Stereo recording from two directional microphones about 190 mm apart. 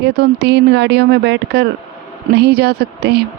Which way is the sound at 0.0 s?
60° right (ahead or behind).